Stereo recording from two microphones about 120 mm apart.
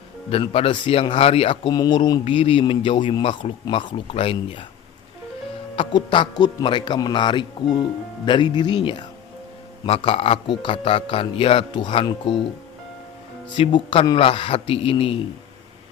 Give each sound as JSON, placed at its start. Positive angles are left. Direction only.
{"t": 0.3, "sound": "speech", "side_deg": 55}
{"t": 1.7, "sound": "speech", "side_deg": 35}
{"t": 2.2, "sound": "speech", "side_deg": 50}
{"t": 5.7, "sound": "speech", "side_deg": 45}
{"t": 11.7, "sound": "speech", "side_deg": 35}
{"t": 12.3, "sound": "speech", "side_deg": 0}
{"t": 13.5, "sound": "speech", "side_deg": 40}